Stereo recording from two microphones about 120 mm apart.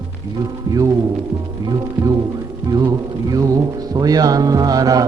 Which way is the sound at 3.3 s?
30° right (ahead or behind).